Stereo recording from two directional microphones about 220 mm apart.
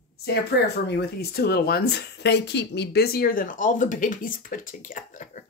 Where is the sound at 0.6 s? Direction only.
45° left (ahead or behind).